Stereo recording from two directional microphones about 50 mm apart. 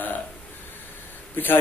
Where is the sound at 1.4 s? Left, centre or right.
Left.